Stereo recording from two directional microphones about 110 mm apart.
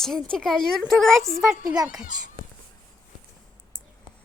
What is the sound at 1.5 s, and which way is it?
Speech, 35° right (ahead or behind).